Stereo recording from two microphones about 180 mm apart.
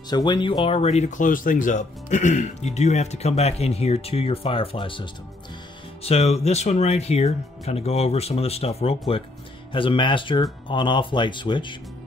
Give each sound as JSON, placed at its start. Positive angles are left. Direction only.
{"t": 0.1, "sound": "speech", "side_deg": 25}